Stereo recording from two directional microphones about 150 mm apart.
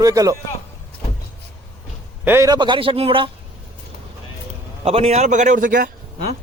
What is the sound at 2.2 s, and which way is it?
Speech, 15° right (ahead or behind).